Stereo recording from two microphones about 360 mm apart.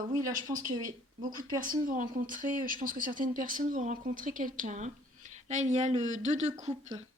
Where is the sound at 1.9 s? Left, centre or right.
Right.